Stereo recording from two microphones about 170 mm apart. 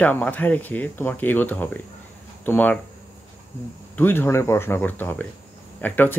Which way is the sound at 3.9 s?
10° left (ahead or behind).